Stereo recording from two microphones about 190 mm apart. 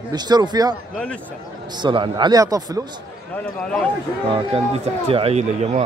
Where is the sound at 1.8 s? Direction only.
25° right (ahead or behind).